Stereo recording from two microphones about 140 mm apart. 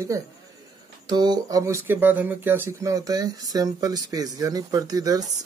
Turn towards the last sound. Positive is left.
turn(degrees=-25)  # may be behind; listen again after turning